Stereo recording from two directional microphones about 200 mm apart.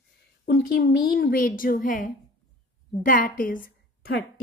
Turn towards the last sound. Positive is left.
turn(degrees=45)  # may be behind; listen again after turning